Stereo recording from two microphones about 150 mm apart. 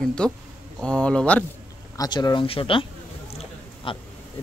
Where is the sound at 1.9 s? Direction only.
25° left (ahead or behind).